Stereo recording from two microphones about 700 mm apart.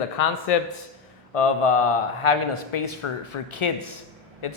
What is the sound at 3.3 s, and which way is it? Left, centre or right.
Speech, left.